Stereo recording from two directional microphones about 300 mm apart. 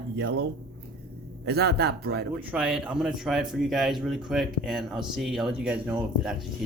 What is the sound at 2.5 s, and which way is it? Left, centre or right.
Speech, centre.